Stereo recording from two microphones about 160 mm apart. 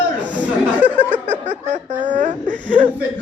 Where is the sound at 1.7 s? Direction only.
50° right (ahead or behind).